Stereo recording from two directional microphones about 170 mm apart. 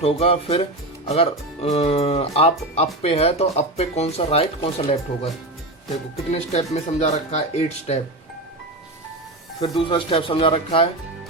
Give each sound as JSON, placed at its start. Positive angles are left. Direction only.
{"t": 0.0, "sound": "speech", "side_deg": 35}
{"t": 6.3, "sound": "speech", "side_deg": 40}
{"t": 9.6, "sound": "speech", "side_deg": 30}